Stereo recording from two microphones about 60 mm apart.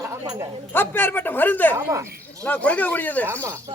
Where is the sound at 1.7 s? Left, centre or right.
Right.